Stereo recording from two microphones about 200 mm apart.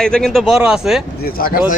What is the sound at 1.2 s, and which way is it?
Speech, 50° left (ahead or behind).